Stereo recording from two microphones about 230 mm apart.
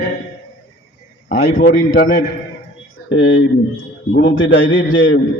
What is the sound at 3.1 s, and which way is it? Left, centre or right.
A man's voice, left.